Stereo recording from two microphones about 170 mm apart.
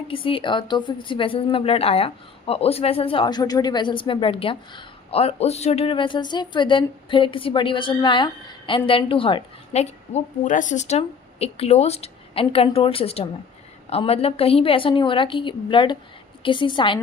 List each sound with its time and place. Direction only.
0.1 s a woman's voice: 30° left (ahead or behind)